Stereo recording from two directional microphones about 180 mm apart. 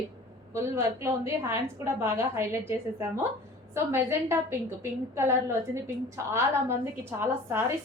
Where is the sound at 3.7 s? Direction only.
15° right (ahead or behind).